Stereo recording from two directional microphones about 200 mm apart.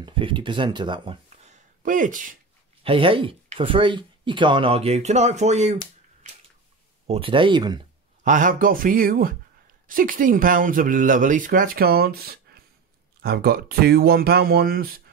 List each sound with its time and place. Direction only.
0.0 s speech: 25° right (ahead or behind); by 2.3 s 40° right (ahead or behind)
2.8 s speech: 25° right (ahead or behind)
7.1 s speech: 25° right (ahead or behind)
8.2 s speech: 40° right (ahead or behind)